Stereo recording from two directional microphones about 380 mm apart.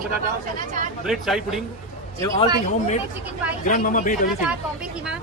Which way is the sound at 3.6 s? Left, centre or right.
Left.